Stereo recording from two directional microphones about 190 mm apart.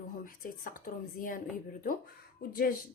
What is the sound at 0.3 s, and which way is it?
Speech, 45° left (ahead or behind).